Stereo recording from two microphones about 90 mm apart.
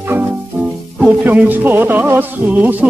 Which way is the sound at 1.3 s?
20° right (ahead or behind).